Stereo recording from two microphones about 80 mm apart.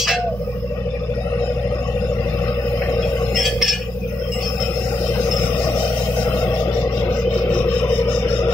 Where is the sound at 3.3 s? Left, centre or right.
Centre.